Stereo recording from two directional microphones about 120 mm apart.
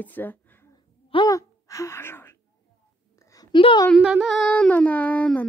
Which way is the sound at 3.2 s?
30° left (ahead or behind).